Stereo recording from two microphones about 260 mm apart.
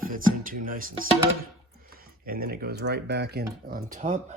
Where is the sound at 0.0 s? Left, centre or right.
Right.